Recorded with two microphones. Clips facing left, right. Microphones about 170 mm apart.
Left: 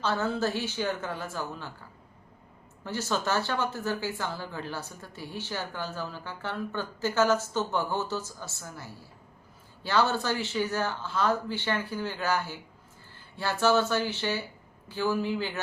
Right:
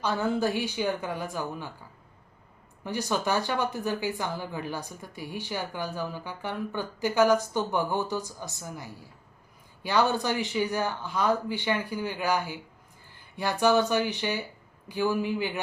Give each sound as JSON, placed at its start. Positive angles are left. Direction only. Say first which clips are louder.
{"t": 0.0, "sound": "speech", "louder": "right 2 dB", "side_deg": -15}
{"t": 2.8, "sound": "speech", "louder": "right 2 dB", "side_deg": -15}